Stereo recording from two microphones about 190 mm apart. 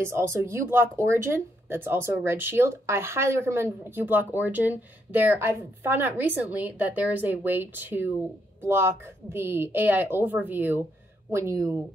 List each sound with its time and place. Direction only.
0.0 s speech: 15° right (ahead or behind)